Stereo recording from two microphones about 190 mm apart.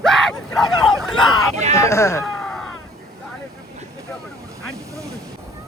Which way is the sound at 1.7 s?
15° left (ahead or behind).